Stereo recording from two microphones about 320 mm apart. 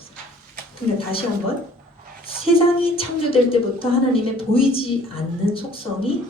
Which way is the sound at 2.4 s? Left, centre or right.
Centre.